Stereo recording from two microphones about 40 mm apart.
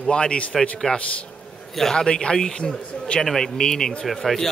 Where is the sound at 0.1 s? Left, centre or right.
Left.